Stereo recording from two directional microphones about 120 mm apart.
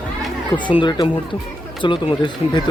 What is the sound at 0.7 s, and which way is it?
Speech, 40° left (ahead or behind).